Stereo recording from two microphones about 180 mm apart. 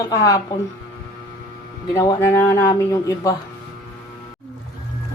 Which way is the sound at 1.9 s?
15° left (ahead or behind).